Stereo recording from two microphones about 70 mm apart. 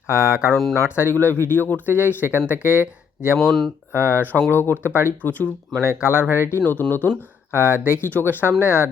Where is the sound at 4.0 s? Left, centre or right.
Left.